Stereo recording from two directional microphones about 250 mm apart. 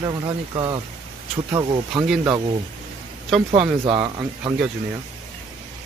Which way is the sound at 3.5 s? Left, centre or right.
Centre.